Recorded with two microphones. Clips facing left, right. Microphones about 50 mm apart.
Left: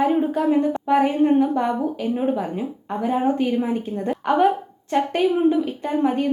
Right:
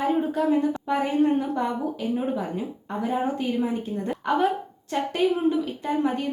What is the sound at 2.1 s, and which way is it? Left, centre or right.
A woman's voice, left.